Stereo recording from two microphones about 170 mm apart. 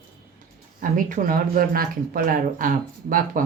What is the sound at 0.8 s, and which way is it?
Speech, 55° right (ahead or behind).